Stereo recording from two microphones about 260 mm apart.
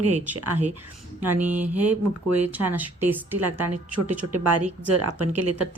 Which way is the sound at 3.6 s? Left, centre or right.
Right.